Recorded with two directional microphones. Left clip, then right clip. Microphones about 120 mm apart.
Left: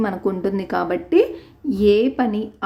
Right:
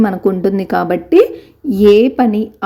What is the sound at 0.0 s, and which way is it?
A woman's voice, 30° right (ahead or behind).